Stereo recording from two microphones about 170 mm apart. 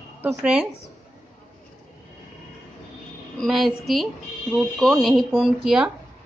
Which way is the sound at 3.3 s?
Centre (ahead or behind).